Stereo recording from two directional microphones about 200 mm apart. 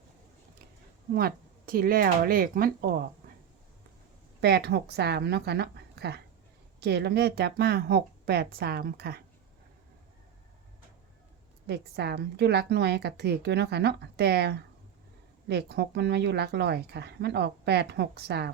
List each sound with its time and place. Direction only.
1.1 s speech: 50° right (ahead or behind)
4.4 s speech: 55° right (ahead or behind)
11.6 s speech: 55° right (ahead or behind)